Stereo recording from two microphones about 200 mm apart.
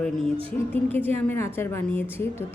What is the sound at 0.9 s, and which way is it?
A woman's voice, 10° left (ahead or behind).